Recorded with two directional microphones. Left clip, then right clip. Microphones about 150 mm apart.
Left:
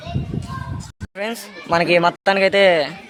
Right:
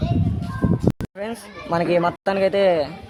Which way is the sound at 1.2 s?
5° left (ahead or behind).